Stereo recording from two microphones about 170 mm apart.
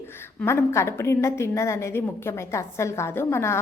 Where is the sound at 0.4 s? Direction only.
15° left (ahead or behind).